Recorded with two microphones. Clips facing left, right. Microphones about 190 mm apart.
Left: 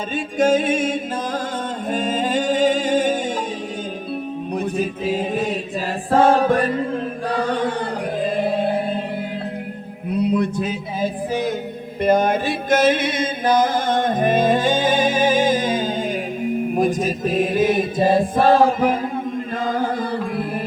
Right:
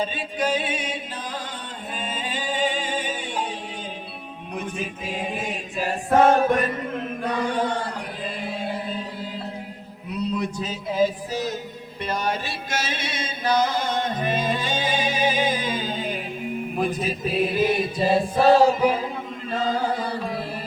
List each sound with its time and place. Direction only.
0.3 s music: 45° left (ahead or behind)
4.5 s chant: 40° left (ahead or behind)
6.1 s music: 30° left (ahead or behind)
8.2 s music: 45° left (ahead or behind)
10.1 s a sound: 55° left (ahead or behind)
12.0 s chant: 55° left (ahead or behind)
19.6 s mantra: 50° left (ahead or behind)